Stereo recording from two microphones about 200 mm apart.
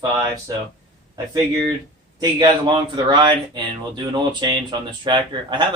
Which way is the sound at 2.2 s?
20° right (ahead or behind).